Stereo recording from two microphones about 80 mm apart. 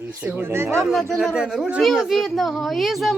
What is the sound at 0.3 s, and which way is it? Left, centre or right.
Speech, right.